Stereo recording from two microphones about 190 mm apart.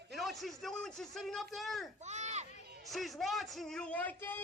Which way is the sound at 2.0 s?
35° right (ahead or behind).